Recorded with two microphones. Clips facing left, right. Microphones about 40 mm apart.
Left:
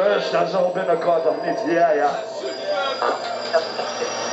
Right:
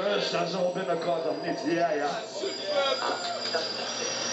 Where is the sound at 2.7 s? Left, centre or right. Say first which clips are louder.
Left 6 dB; centre.